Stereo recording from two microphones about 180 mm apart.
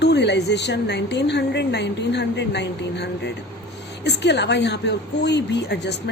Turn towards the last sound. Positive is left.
turn(degrees=70)  # may be behind; listen again after turning